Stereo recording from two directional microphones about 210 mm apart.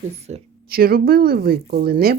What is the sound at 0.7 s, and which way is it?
Speech, 45° right (ahead or behind).